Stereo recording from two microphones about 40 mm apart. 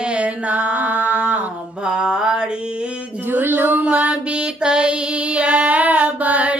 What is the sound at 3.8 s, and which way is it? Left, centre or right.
Female singing, right.